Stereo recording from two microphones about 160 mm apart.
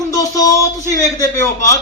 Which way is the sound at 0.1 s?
20° left (ahead or behind).